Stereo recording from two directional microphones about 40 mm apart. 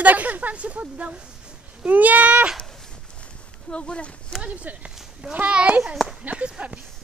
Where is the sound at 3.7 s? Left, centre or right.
Left.